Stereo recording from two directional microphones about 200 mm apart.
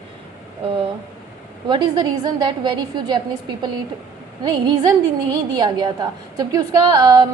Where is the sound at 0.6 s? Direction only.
25° right (ahead or behind).